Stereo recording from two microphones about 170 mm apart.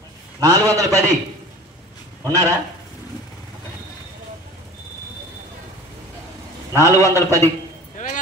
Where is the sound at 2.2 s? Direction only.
20° right (ahead or behind).